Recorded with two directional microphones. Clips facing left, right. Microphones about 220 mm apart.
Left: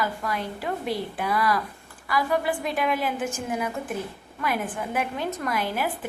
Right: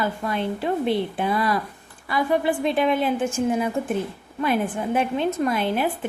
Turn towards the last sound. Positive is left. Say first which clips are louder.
# right 5 dB
turn(degrees=-25)  # may be behind; listen again after turning